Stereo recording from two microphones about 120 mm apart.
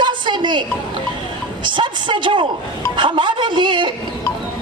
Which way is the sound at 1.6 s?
40° right (ahead or behind).